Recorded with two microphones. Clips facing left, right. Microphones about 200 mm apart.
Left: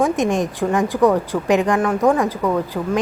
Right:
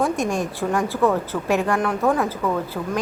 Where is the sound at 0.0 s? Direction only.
20° left (ahead or behind).